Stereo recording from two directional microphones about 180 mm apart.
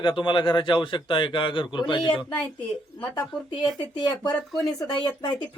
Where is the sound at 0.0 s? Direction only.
25° left (ahead or behind).